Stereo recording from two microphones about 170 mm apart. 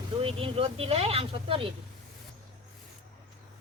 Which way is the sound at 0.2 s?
30° right (ahead or behind).